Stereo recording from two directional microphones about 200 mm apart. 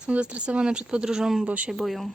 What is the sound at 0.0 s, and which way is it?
Speech, 5° right (ahead or behind).